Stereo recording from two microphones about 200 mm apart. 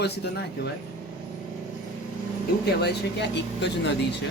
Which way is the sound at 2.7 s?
55° left (ahead or behind).